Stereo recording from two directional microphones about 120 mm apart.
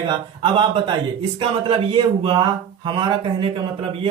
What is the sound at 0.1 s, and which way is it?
A man's voice, 40° right (ahead or behind).